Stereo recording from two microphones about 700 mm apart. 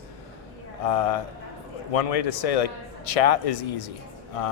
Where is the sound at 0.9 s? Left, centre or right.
Left.